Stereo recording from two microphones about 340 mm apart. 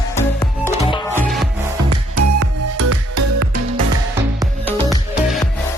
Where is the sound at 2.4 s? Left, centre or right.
Right.